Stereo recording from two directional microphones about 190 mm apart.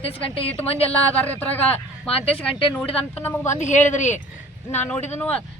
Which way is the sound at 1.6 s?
30° left (ahead or behind).